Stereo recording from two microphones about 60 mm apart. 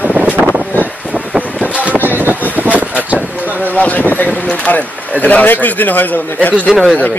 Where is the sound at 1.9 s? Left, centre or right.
Right.